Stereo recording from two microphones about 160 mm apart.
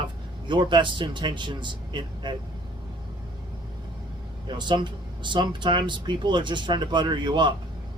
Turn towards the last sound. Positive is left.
turn(degrees=-30)  # may be behind; listen again after turning